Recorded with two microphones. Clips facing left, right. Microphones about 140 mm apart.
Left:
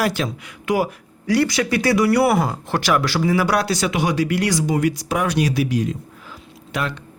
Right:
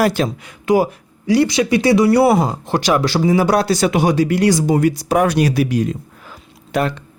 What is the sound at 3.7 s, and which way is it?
Speech, 40° right (ahead or behind).